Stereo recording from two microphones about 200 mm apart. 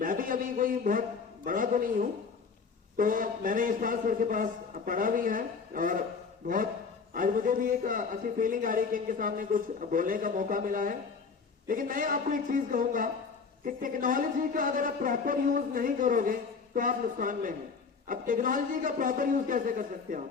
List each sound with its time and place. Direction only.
0.0 s speech: 45° right (ahead or behind)
7.1 s speech: 45° right (ahead or behind)